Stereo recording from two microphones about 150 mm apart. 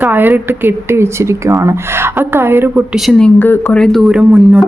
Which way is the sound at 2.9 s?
5° left (ahead or behind).